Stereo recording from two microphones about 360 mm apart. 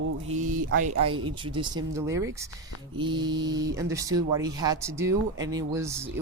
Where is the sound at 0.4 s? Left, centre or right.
Right.